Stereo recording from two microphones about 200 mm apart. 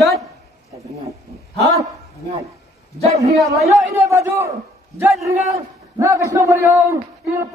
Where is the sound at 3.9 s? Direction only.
15° right (ahead or behind).